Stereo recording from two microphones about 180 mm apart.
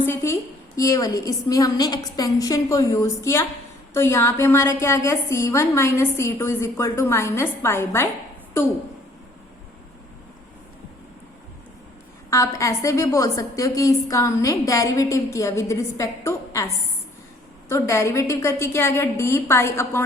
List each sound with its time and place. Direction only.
0.0 s a sound: 15° left (ahead or behind)
0.8 s a woman's voice: 20° left (ahead or behind)
12.3 s a woman's voice: 15° left (ahead or behind)